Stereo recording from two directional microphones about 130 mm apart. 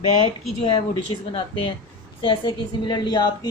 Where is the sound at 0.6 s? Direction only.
40° left (ahead or behind).